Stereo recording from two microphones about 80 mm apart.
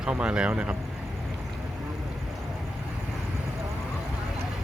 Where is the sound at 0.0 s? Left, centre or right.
Centre.